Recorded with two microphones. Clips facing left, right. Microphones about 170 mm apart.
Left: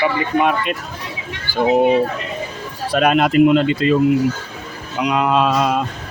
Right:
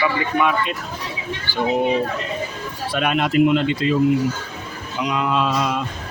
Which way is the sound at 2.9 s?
40° left (ahead or behind).